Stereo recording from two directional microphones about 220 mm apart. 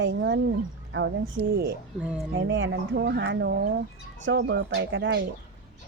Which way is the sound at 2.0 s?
5° right (ahead or behind).